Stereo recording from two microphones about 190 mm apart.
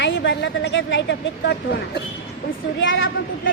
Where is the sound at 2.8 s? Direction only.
85° left.